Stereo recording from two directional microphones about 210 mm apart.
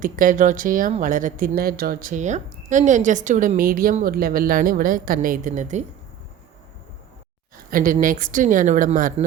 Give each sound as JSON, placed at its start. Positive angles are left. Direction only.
{"t": 0.0, "sound": "speech", "side_deg": -40}
{"t": 7.7, "sound": "speech", "side_deg": -40}